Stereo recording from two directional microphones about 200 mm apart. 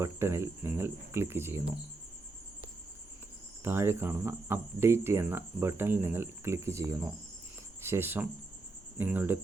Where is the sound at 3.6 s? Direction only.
10° right (ahead or behind).